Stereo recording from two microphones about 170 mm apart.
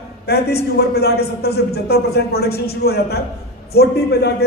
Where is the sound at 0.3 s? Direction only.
70° left (ahead or behind).